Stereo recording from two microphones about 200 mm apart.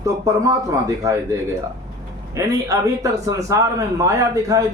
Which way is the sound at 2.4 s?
15° right (ahead or behind).